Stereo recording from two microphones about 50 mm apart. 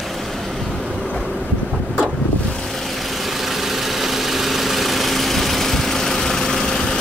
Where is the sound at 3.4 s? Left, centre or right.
Centre.